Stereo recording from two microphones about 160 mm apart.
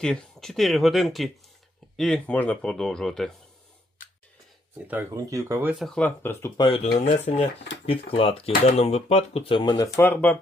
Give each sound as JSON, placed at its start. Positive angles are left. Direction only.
{"t": 0.0, "sound": "speech", "side_deg": 5}
{"t": 4.9, "sound": "speech", "side_deg": -15}
{"t": 5.8, "sound": "speech", "side_deg": 5}
{"t": 6.6, "sound": "speech", "side_deg": 35}